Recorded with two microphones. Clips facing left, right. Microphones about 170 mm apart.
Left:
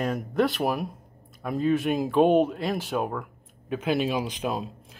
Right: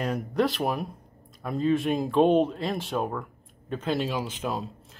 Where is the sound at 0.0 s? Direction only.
Centre (ahead or behind).